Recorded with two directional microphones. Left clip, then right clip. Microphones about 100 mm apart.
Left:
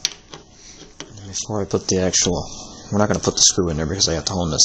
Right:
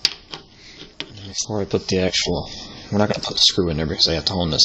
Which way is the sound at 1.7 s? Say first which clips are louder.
Left 1 dB; 15° left (ahead or behind).